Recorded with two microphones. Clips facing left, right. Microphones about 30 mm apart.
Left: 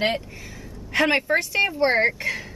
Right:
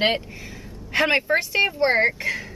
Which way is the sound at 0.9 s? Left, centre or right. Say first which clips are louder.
Even; centre.